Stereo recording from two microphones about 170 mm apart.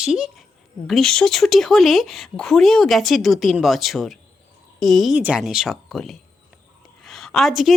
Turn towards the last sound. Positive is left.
turn(degrees=0)  # may be behind; listen again after turning